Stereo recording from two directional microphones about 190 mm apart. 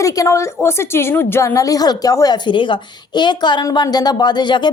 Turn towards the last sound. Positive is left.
turn(degrees=25)  # may be behind; listen again after turning